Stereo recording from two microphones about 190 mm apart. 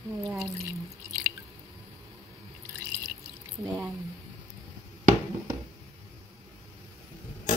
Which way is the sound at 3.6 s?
10° right (ahead or behind).